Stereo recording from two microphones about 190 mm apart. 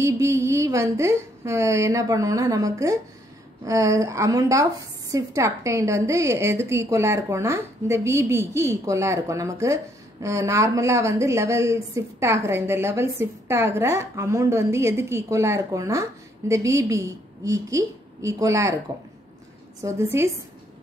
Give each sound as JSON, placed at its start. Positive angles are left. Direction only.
{"t": 0.0, "sound": "a woman's voice", "side_deg": -15}
{"t": 19.8, "sound": "a woman's voice", "side_deg": -10}